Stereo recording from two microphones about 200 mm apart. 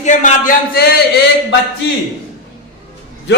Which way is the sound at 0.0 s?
40° left (ahead or behind).